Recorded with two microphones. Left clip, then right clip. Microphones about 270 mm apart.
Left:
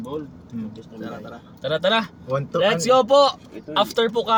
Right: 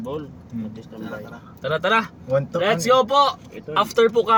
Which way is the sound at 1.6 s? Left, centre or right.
Centre.